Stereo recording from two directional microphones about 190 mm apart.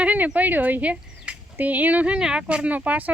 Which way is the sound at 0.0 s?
5° right (ahead or behind).